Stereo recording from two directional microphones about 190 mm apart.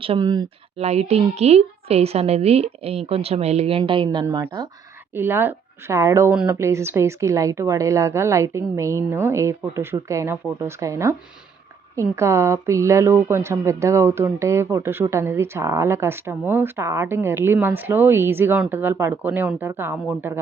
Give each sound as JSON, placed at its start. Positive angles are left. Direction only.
{"t": 0.0, "sound": "speech", "side_deg": -25}
{"t": 0.8, "sound": "a woman's voice", "side_deg": -35}
{"t": 5.1, "sound": "a woman's voice", "side_deg": -10}